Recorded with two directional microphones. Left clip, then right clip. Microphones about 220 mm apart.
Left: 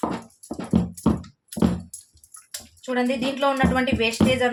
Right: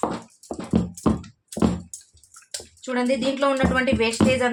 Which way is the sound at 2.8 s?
25° right (ahead or behind).